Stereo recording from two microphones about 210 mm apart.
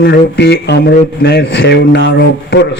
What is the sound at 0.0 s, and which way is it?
A man's voice, 55° left (ahead or behind).